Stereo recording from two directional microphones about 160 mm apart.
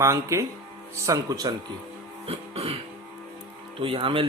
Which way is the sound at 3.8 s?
35° right (ahead or behind).